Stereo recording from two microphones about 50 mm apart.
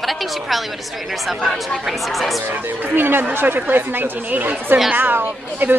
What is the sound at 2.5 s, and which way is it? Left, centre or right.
A woman's voice, right.